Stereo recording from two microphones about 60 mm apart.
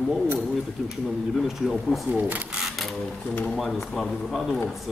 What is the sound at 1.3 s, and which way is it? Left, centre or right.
Speech, centre.